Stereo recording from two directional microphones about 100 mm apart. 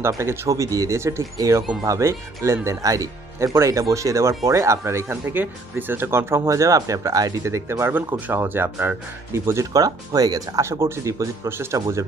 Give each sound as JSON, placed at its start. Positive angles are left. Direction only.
{"t": 0.2, "sound": "speech", "side_deg": -30}